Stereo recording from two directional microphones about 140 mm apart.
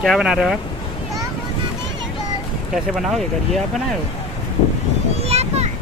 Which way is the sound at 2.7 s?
Centre (ahead or behind).